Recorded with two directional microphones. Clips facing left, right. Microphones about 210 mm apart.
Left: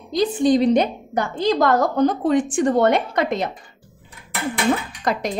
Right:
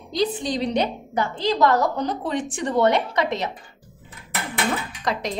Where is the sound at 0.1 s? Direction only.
50° left (ahead or behind).